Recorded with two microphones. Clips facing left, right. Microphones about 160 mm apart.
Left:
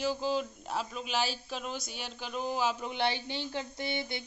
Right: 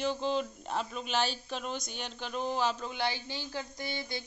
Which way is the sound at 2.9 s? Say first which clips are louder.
Left 2 dB; 20° left (ahead or behind).